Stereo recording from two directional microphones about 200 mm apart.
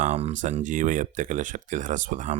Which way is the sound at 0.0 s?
35° right (ahead or behind).